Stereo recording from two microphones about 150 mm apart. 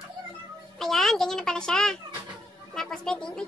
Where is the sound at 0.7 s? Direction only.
Centre (ahead or behind).